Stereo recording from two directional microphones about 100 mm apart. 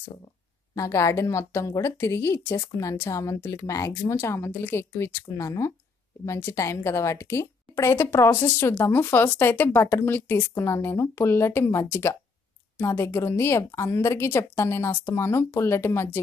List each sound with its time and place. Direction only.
0.7 s a woman's voice: 30° left (ahead or behind)